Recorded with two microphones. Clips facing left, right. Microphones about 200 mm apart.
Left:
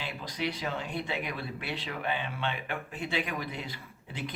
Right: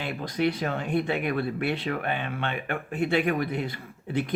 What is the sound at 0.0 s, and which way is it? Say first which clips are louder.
Speech: right 8 dB; 55° right (ahead or behind).